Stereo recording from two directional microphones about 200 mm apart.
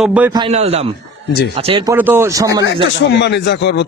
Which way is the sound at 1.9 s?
10° right (ahead or behind).